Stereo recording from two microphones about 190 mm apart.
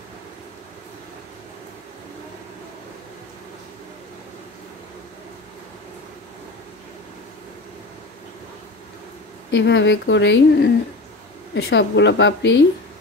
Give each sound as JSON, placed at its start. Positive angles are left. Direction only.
{"t": 9.5, "sound": "speech", "side_deg": 70}